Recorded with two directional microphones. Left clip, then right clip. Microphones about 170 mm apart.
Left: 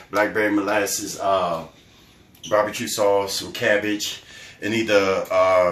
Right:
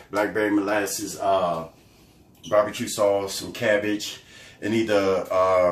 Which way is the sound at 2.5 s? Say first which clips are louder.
Left 1 dB; centre (ahead or behind).